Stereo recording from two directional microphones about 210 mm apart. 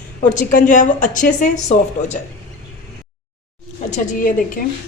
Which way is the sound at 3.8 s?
35° left (ahead or behind).